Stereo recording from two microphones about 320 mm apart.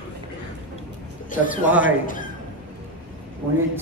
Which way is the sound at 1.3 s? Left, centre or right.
Left.